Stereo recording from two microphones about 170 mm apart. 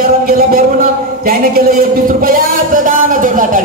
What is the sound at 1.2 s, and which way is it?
Speech, 60° right (ahead or behind).